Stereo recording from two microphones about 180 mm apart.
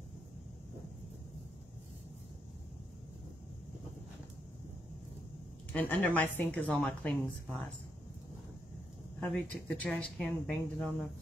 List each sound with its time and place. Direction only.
5.7 s a woman's voice: 10° left (ahead or behind)
9.3 s speech: 5° left (ahead or behind)